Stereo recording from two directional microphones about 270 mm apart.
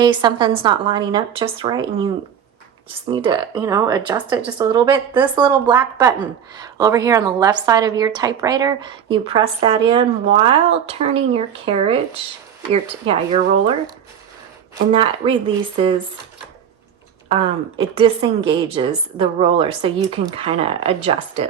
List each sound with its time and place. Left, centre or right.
0.0 s a woman's voice: centre
3.1 s a woman's voice: centre
14.9 s a woman's voice: centre
17.2 s a woman's voice: centre